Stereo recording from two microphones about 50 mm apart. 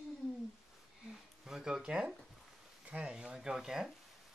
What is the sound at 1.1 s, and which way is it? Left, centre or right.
Speech, centre.